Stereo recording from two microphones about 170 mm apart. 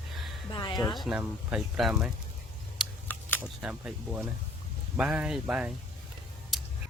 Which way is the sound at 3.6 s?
5° right (ahead or behind).